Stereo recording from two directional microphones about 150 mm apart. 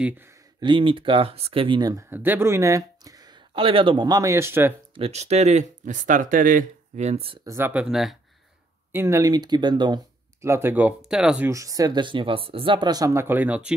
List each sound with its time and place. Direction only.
0.0 s speech: 15° right (ahead or behind)
0.6 s speech: 35° right (ahead or behind)
2.0 s speech: 15° right (ahead or behind)
4.9 s speech: 45° right (ahead or behind)
7.4 s speech: 15° right (ahead or behind)
8.9 s speech: 20° right (ahead or behind)
11.5 s speech: 25° right (ahead or behind)